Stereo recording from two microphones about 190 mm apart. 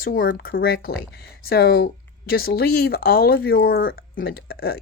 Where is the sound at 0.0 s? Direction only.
50° left (ahead or behind).